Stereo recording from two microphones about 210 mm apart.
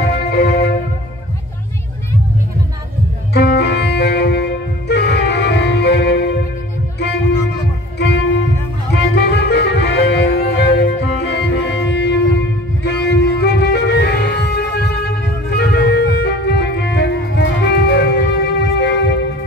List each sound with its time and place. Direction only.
0.0 s music: 50° left (ahead or behind)
3.3 s music: 50° left (ahead or behind)
8.0 s music: 55° left (ahead or behind)